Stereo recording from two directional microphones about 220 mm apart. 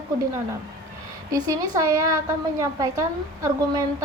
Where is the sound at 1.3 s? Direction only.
15° right (ahead or behind).